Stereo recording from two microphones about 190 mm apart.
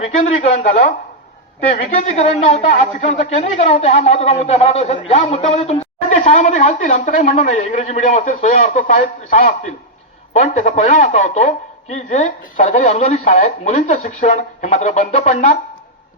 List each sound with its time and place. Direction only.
0.2 s a woman's voice: 35° left (ahead or behind)